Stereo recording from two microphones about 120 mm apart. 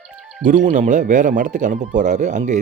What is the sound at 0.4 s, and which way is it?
Speech, 90° right.